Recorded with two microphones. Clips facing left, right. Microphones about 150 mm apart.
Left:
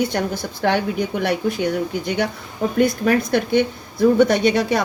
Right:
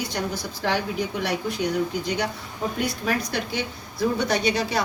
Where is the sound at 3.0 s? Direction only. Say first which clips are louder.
Left 8 dB; 55° left (ahead or behind).